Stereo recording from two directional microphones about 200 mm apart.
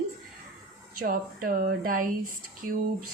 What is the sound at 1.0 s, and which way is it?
Speech, 45° right (ahead or behind).